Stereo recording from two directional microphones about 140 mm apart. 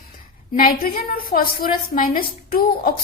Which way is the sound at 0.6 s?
90° left.